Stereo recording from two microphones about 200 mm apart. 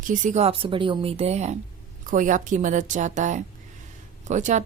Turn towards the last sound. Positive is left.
turn(degrees=-35)  # may be behind; listen again after turning